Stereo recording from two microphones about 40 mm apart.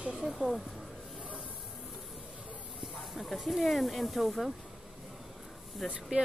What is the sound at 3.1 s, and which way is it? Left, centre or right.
Speech, centre.